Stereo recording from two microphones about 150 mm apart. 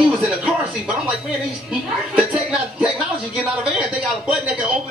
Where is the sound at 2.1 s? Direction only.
5° right (ahead or behind).